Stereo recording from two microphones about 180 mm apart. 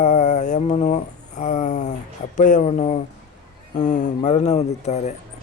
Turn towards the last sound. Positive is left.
turn(degrees=40)  # may be behind; listen again after turning